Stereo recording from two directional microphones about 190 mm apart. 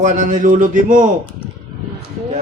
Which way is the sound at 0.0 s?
40° right (ahead or behind).